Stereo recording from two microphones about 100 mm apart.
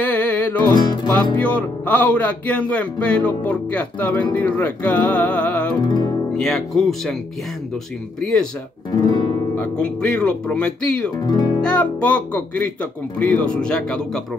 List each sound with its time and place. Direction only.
0.0 s music: 15° left (ahead or behind)
0.7 s speech: 45° left (ahead or behind)
1.4 s speech: 15° left (ahead or behind)
5.8 s music: 45° left (ahead or behind)
6.3 s speech: 5° left (ahead or behind)
8.2 s speech: 5° left (ahead or behind)
8.9 s guitar: 45° left (ahead or behind)
9.6 s speech: 10° left (ahead or behind)
11.1 s speech: 40° left (ahead or behind)
11.6 s speech: 10° left (ahead or behind)